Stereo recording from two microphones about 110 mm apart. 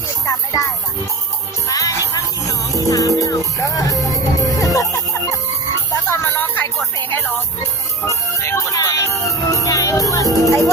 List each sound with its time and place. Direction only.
0.3 s music: 30° left (ahead or behind)
8.0 s music: 25° left (ahead or behind)